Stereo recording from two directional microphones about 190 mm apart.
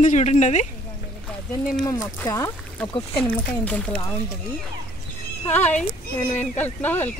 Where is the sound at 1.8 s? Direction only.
15° left (ahead or behind).